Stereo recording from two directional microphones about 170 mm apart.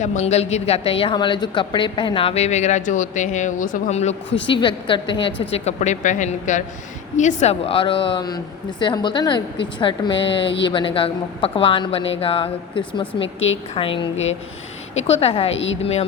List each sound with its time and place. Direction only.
0.0 s speech: 45° left (ahead or behind)
4.6 s a woman's voice: 30° left (ahead or behind)
15.0 s speech: 35° left (ahead or behind)
15.5 s a woman's voice: 90° left
15.8 s speech: 35° left (ahead or behind)